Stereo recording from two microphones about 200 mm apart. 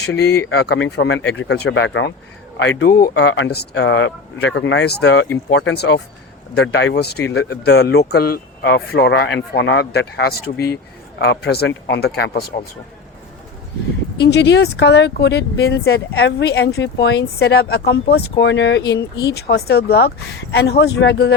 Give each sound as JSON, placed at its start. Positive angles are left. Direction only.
{"t": 0.3, "sound": "speech", "side_deg": 55}
{"t": 14.2, "sound": "speech", "side_deg": 60}